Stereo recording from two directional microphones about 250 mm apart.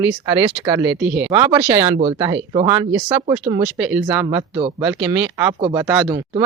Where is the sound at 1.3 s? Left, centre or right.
Centre.